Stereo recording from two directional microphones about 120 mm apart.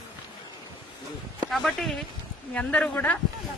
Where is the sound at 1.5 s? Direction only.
Centre (ahead or behind).